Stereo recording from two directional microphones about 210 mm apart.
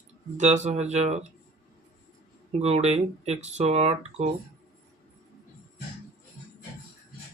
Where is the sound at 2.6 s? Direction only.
30° right (ahead or behind).